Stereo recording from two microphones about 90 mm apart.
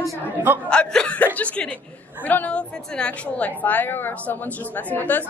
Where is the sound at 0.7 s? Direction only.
10° left (ahead or behind).